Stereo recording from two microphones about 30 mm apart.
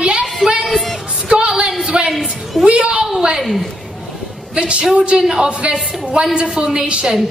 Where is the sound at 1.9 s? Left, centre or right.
Right.